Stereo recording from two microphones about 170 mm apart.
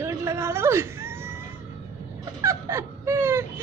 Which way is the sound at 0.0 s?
15° right (ahead or behind).